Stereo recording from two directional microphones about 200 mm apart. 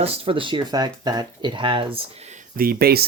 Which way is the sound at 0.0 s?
30° right (ahead or behind).